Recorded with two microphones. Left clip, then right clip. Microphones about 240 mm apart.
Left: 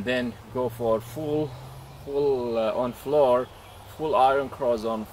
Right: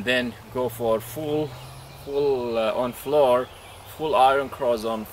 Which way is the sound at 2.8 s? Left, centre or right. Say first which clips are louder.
Right 1 dB; centre.